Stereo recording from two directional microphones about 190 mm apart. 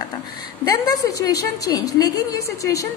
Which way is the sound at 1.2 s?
20° left (ahead or behind).